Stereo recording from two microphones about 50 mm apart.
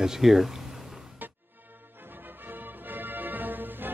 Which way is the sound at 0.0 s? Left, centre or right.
Centre.